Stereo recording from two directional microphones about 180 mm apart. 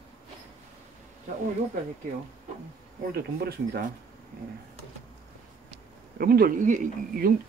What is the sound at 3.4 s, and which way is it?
Speech, 65° right (ahead or behind).